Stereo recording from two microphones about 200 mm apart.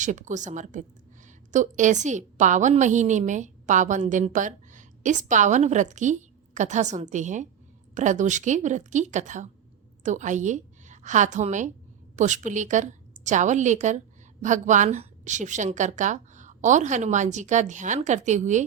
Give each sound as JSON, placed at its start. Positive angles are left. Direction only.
{"t": 0.0, "sound": "a woman's voice", "side_deg": -40}